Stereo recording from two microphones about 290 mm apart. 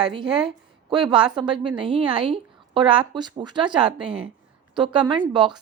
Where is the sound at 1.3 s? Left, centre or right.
Centre.